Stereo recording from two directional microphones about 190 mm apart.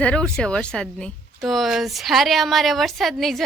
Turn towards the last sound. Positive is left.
turn(degrees=0)  # may be behind; listen again after turning